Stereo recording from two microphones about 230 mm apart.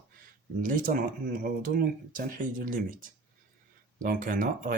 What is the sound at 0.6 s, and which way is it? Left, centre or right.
Speech, right.